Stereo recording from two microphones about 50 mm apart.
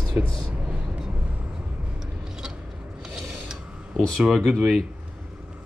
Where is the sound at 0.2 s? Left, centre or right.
Right.